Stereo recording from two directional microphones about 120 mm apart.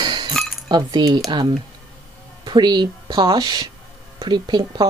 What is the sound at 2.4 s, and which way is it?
Speech, 40° right (ahead or behind).